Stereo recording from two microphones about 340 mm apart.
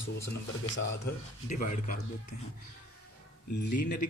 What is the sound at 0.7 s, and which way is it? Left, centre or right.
Speech, left.